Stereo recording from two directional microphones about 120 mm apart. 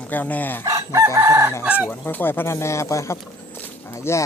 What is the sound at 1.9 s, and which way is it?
Speech, 15° left (ahead or behind).